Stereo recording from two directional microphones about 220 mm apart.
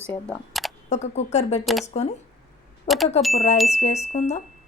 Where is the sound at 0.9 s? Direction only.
30° left (ahead or behind).